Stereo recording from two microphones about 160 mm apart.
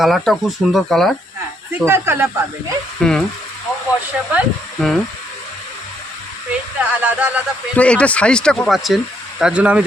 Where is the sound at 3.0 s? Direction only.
5° left (ahead or behind).